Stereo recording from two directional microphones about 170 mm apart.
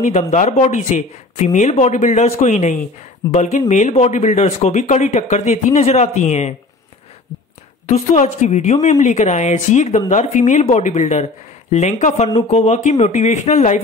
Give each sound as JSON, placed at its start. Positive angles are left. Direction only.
{"t": 0.0, "sound": "speech", "side_deg": 45}
{"t": 7.9, "sound": "speech", "side_deg": 45}